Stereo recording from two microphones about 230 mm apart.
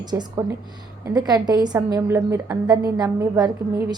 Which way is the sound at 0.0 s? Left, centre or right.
Centre.